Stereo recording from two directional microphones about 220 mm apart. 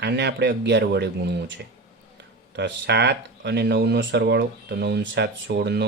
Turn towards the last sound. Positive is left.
turn(degrees=-45)  # may be behind; listen again after turning